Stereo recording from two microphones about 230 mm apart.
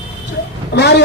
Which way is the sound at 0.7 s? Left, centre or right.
Left.